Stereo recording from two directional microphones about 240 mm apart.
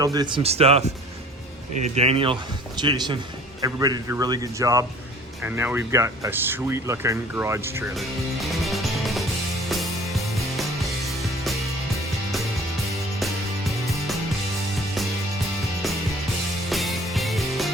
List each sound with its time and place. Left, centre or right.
0.0 s speech: centre
2.0 s speech: right
7.9 s music: centre
13.1 s music: centre
16.6 s music: centre